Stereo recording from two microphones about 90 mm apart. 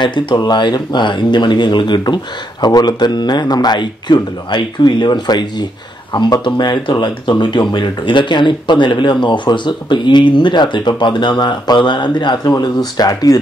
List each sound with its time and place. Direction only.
0.0 s speech: 55° left (ahead or behind)